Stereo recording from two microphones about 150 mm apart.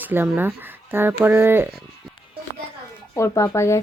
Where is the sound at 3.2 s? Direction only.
20° left (ahead or behind).